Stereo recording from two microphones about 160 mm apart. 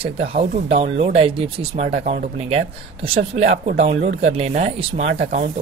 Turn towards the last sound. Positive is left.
turn(degrees=-40)  # may be behind; listen again after turning